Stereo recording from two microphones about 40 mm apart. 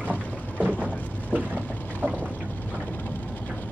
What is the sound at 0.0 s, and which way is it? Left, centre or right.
Boat, right.